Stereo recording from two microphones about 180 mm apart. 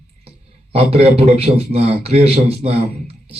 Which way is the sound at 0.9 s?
35° right (ahead or behind).